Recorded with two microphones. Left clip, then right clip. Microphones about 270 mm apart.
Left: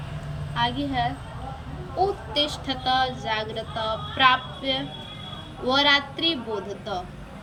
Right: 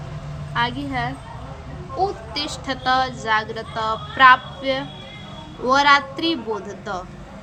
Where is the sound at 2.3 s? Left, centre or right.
Centre.